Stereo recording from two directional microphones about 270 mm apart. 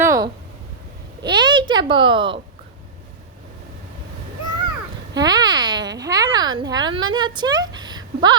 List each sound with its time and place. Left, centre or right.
0.0 s a sound: centre
1.2 s a woman's voice: centre
5.1 s a woman's voice: centre